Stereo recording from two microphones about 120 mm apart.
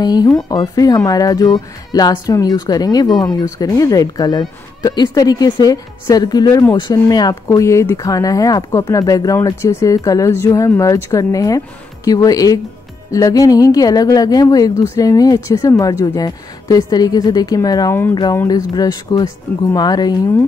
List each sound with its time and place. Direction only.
0.0 s speech: 35° left (ahead or behind)